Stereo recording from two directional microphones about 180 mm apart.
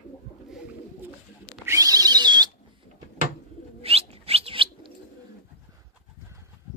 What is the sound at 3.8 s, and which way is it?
Bird, 35° right (ahead or behind).